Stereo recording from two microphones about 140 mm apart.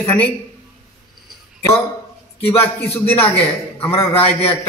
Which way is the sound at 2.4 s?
15° left (ahead or behind).